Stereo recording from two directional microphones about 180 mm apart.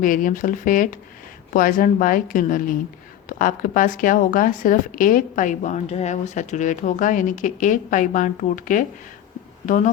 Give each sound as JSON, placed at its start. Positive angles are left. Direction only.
{"t": 0.0, "sound": "speech", "side_deg": 50}